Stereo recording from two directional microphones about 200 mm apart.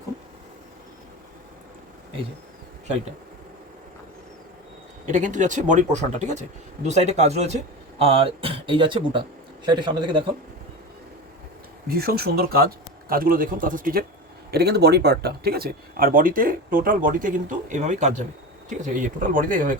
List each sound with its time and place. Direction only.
5.0 s speech: 40° right (ahead or behind); by 10.2 s 25° right (ahead or behind)
11.9 s speech: 50° right (ahead or behind)